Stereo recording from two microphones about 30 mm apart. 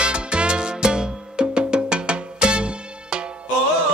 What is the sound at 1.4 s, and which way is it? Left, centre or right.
Music, right.